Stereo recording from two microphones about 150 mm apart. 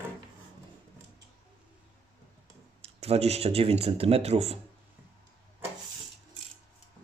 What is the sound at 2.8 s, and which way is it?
Speech, 45° right (ahead or behind).